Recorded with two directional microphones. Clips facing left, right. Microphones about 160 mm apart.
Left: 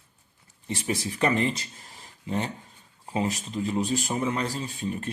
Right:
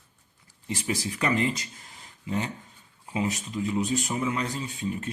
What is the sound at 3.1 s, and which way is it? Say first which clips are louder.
A man's voice: left 1 dB; 40° left (ahead or behind).